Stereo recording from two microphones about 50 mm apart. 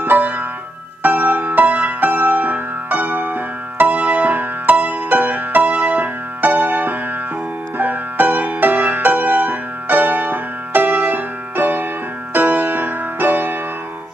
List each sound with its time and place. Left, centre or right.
0.0 s music: right